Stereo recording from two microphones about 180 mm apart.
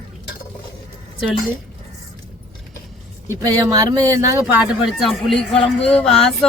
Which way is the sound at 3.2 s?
15° right (ahead or behind).